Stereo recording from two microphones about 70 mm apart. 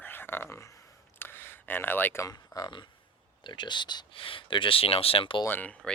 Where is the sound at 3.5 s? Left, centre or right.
Left.